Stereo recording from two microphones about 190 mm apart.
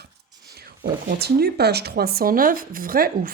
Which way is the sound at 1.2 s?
55° right (ahead or behind).